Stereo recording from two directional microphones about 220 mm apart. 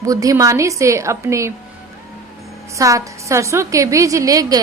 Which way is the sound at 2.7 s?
15° right (ahead or behind).